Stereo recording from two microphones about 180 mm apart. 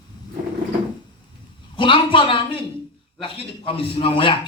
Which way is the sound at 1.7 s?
30° left (ahead or behind).